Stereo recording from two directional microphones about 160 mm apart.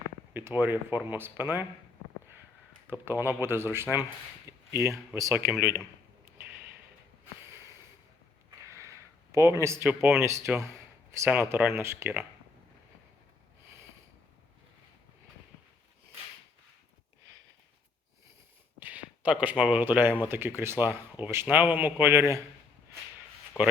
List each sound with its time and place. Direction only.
0.3 s speech: 10° right (ahead or behind)
2.9 s speech: 15° right (ahead or behind)
8.4 s a sound: 20° right (ahead or behind)
9.6 s speech: 15° right (ahead or behind)
18.8 s speech: 10° right (ahead or behind)